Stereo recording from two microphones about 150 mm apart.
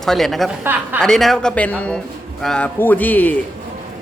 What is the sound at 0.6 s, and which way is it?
Speech, 15° right (ahead or behind).